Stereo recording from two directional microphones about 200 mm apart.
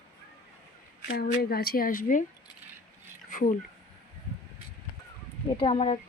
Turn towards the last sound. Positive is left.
turn(degrees=30)  # may be behind; listen again after turning